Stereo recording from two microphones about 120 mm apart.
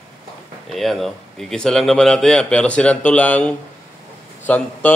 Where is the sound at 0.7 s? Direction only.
Centre (ahead or behind).